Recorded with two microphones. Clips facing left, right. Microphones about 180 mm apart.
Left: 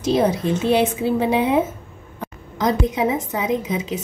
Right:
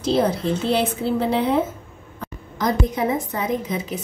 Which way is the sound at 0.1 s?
15° left (ahead or behind).